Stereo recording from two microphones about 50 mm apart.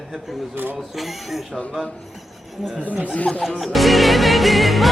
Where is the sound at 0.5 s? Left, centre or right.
Right.